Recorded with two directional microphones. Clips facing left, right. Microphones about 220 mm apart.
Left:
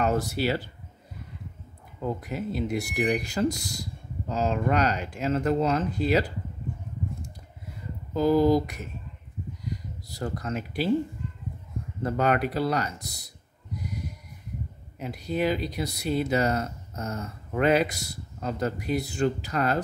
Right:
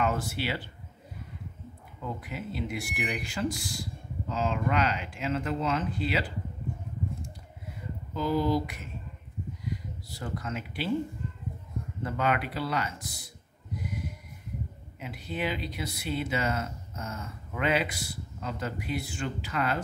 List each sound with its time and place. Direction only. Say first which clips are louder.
0.0 s speech: left 5 dB; 40° left (ahead or behind)
2.0 s speech: left 6 dB; 40° left (ahead or behind)
8.1 s a sound: left 7 dB; 45° left (ahead or behind)
12.0 s speech: left 5 dB; 40° left (ahead or behind)
13.8 s snort: left 1 dB; 40° left (ahead or behind)
15.0 s speech: left 6 dB; 40° left (ahead or behind)